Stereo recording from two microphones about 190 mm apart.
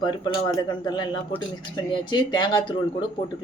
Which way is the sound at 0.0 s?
25° left (ahead or behind).